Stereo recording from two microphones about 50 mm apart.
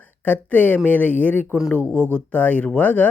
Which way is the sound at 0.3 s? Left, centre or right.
Left.